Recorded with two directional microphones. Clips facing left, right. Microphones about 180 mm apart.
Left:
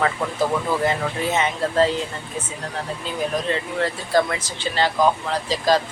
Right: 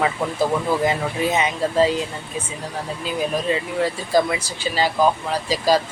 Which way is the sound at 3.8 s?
10° right (ahead or behind).